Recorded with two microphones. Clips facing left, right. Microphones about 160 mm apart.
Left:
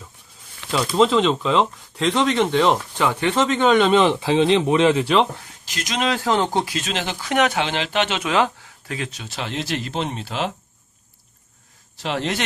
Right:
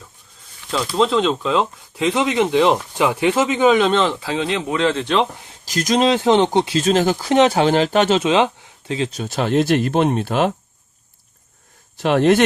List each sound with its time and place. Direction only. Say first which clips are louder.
0.7 s speech: left 1 dB; centre (ahead or behind)
3.9 s speech: left 3 dB; 20° left (ahead or behind); by 5.3 s 5° left (ahead or behind)
5.6 s speech: right 8 dB; 40° right (ahead or behind)
6.1 s speech: right 3 dB; 25° right (ahead or behind)
6.7 s speech: right 10 dB; 40° right (ahead or behind)
8.2 s speech: right 4 dB; 20° right (ahead or behind)
9.1 s speech: right 11 dB; 45° right (ahead or behind)
11.9 s speech: right 10 dB; 55° right (ahead or behind)